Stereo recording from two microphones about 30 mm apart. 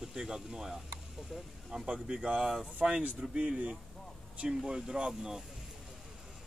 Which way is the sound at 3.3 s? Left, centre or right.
Right.